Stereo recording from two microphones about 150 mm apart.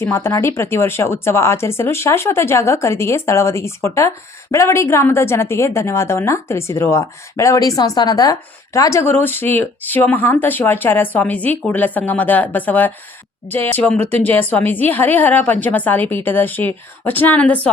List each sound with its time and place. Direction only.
0.0 s a woman's voice: 15° left (ahead or behind)